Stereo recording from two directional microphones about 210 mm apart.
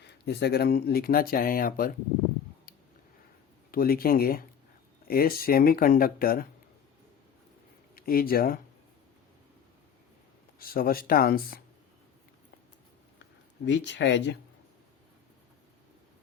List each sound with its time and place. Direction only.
0.0 s speech: 50° left (ahead or behind)
3.7 s speech: 45° left (ahead or behind)
7.9 s speech: 45° left (ahead or behind)
10.6 s speech: 45° left (ahead or behind)
13.7 s speech: 60° left (ahead or behind)